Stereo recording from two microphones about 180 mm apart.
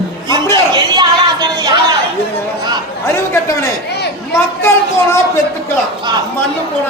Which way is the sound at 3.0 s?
15° left (ahead or behind).